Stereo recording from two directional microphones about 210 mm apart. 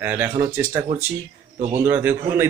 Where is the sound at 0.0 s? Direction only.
10° right (ahead or behind).